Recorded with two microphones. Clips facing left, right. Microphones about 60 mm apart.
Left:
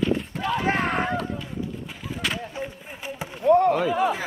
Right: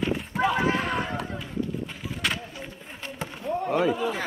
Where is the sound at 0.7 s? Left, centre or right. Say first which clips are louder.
Left 3 dB; left.